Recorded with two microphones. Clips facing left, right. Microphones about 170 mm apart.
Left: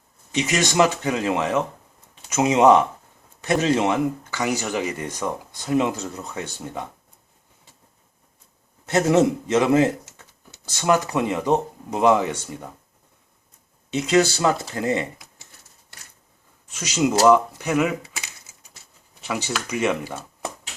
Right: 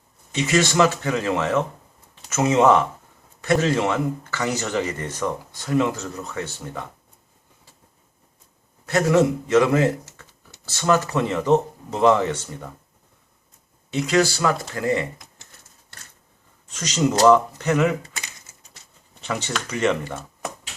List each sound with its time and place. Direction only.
0.3 s speech: 15° left (ahead or behind)
8.9 s speech: 20° left (ahead or behind)
13.9 s speech: 20° left (ahead or behind)
16.6 s speech: 10° left (ahead or behind)